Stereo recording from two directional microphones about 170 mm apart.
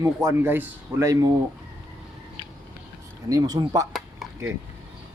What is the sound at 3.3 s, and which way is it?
Speech, 20° right (ahead or behind).